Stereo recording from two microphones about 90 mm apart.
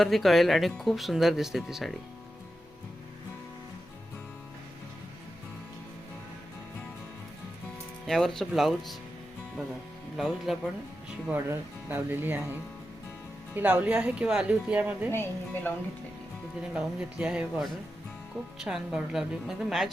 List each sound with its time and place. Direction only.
0.0 s speech: centre (ahead or behind)
8.0 s speech: 5° left (ahead or behind)
10.2 s speech: centre (ahead or behind)
11.3 s speech: 20° right (ahead or behind)
13.6 s speech: 20° right (ahead or behind)
15.1 s a woman's voice: 25° left (ahead or behind)
16.7 s speech: 10° right (ahead or behind)
18.6 s speech: 5° right (ahead or behind)